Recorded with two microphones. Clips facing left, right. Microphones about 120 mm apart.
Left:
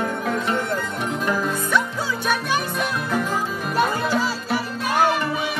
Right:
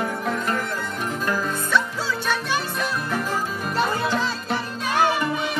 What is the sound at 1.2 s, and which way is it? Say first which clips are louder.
Music: left 2 dB; 15° left (ahead or behind).